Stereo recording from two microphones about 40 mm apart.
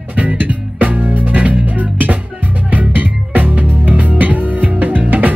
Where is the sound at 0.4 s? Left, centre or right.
Right.